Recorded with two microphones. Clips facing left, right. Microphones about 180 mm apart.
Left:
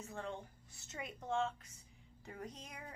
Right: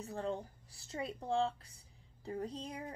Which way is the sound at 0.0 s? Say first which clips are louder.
Right 6 dB; 35° right (ahead or behind).